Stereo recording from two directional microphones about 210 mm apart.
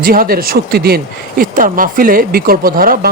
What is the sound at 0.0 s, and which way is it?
Speech, 45° right (ahead or behind).